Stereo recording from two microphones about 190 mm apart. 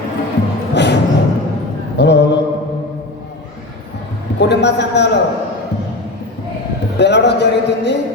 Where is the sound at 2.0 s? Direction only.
65° left (ahead or behind).